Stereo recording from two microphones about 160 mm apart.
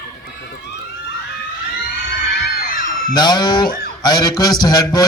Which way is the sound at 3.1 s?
25° left (ahead or behind).